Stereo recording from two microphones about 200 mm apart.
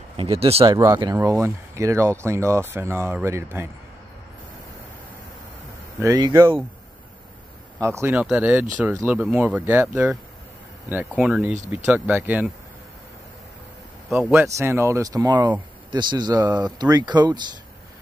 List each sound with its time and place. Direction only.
0.2 s speech: 30° right (ahead or behind)
0.7 s speech: 20° right (ahead or behind)
5.9 s speech: 15° right (ahead or behind)
7.8 s speech: 15° right (ahead or behind)
14.0 s speech: 10° right (ahead or behind)